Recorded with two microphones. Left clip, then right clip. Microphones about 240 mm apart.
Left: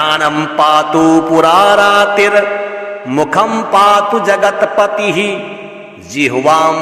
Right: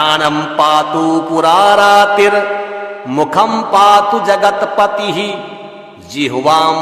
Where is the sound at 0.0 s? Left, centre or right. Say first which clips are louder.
Even; centre.